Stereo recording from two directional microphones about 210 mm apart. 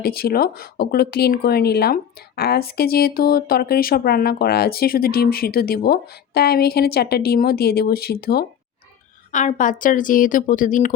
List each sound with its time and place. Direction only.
0.0 s speech: 45° left (ahead or behind)
9.3 s speech: 35° left (ahead or behind)